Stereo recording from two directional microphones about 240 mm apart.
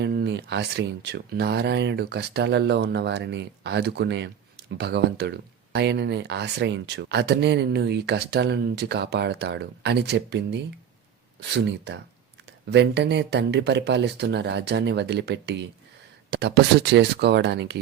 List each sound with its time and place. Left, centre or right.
0.0 s speech: right